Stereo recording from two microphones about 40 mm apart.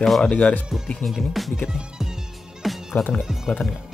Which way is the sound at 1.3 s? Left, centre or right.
Centre.